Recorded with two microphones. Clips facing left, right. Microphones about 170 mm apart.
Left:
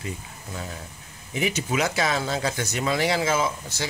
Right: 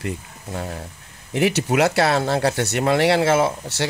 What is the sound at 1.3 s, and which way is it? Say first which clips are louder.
Speech: right 7 dB; 70° right (ahead or behind).